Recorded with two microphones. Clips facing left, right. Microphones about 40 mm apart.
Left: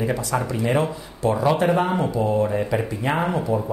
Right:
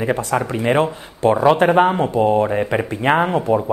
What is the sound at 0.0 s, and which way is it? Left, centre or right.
Speech, right.